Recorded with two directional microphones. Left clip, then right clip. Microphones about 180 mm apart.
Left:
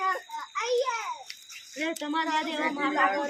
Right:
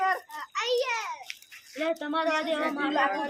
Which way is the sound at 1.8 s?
55° right (ahead or behind).